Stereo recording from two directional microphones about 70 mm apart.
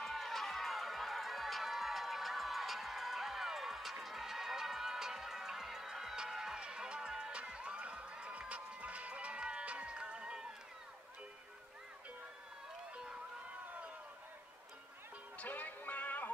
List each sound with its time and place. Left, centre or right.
0.0 s crowd: centre
15.3 s music: left